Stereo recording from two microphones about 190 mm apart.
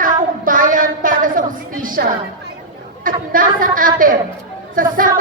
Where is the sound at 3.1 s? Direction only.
45° right (ahead or behind).